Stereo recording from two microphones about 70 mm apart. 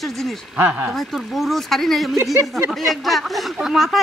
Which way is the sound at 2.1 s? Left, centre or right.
Right.